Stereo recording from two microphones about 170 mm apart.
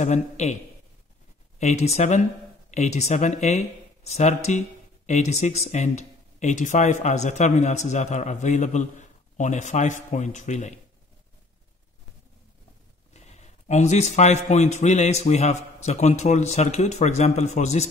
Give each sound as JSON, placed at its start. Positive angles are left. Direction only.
{"t": 0.0, "sound": "speech", "side_deg": 40}
{"t": 1.6, "sound": "speech", "side_deg": 40}
{"t": 13.1, "sound": "speech", "side_deg": 40}